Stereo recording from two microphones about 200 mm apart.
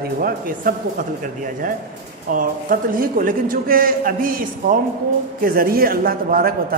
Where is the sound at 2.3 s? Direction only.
45° right (ahead or behind).